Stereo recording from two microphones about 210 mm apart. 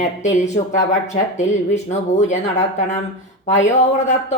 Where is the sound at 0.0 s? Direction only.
35° left (ahead or behind).